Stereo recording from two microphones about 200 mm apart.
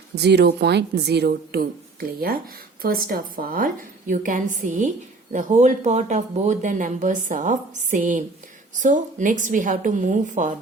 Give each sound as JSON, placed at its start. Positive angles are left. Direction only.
{"t": 0.2, "sound": "a woman's voice", "side_deg": -55}